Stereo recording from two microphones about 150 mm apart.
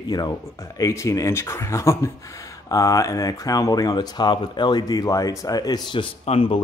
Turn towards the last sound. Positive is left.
turn(degrees=40)  # may be behind; listen again after turning